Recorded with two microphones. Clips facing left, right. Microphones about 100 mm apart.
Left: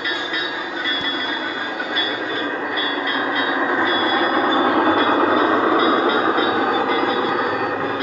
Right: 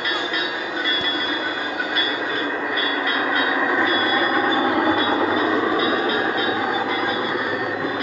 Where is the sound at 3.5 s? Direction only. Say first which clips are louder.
Left 1 dB; 20° left (ahead or behind).